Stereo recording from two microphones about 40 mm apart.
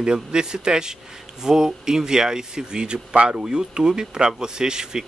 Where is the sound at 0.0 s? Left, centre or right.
Centre.